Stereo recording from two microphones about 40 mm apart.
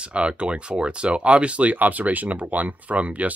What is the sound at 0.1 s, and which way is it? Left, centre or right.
Speech, right.